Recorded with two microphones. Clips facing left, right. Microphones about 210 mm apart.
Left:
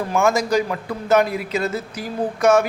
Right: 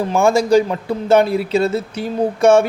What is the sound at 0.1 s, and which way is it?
A man's voice, 30° right (ahead or behind).